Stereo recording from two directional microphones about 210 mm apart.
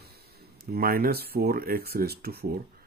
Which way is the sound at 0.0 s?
45° right (ahead or behind).